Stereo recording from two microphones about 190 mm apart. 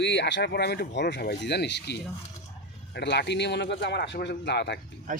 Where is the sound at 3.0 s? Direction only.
65° left (ahead or behind).